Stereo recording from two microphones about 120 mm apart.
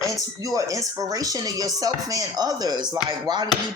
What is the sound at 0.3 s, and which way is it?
Speech, 30° right (ahead or behind).